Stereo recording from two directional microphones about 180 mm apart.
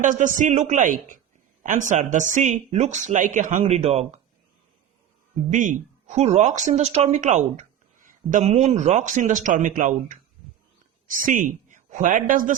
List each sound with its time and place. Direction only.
0.0 s speech: 45° right (ahead or behind)
5.5 s speech: 45° right (ahead or behind)